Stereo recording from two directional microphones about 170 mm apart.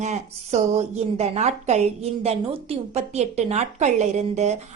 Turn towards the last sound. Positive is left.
turn(degrees=-40)  # may be behind; listen again after turning